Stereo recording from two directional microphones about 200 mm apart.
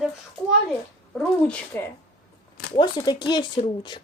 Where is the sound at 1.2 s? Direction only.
5° left (ahead or behind).